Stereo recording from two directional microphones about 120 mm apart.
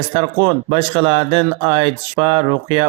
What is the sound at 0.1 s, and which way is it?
Speech, 40° right (ahead or behind).